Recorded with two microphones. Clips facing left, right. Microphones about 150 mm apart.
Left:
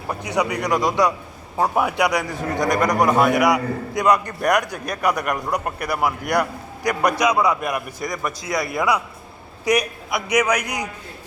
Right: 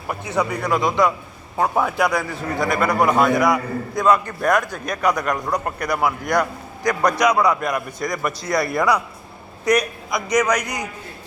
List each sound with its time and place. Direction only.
0.3 s a man's voice: 15° left (ahead or behind)